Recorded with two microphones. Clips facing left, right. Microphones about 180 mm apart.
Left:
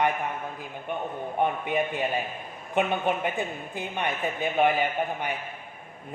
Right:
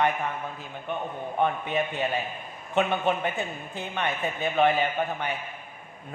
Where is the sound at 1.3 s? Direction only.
10° left (ahead or behind).